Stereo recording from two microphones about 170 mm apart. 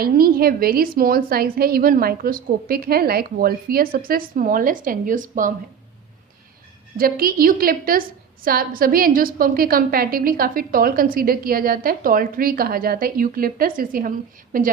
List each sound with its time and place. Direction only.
0.0 s a woman's voice: 60° right (ahead or behind)
6.9 s a woman's voice: 60° right (ahead or behind)